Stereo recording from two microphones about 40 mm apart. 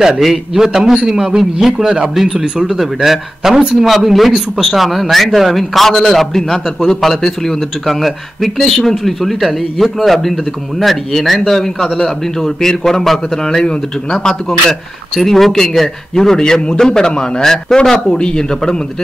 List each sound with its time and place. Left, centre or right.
0.2 s a man's voice: centre
2.6 s a man's voice: centre
15.1 s a man's voice: centre